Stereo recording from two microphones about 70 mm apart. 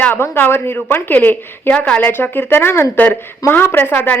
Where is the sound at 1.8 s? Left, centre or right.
Centre.